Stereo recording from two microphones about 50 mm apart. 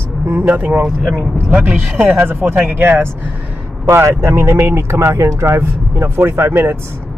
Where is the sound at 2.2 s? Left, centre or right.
Right.